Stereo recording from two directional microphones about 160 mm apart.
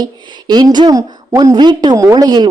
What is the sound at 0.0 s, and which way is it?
A woman's voice, 25° right (ahead or behind).